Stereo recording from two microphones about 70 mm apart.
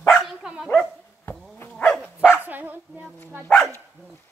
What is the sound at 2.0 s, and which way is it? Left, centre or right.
Dog, centre.